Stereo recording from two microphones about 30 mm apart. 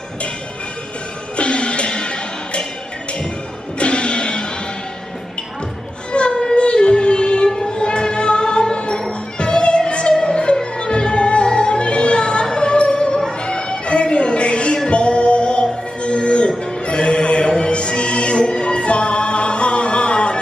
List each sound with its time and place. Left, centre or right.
1.3 s music: left
3.8 s music: left
6.1 s music: left